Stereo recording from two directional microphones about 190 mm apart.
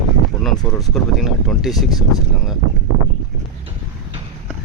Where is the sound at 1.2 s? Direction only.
Centre (ahead or behind).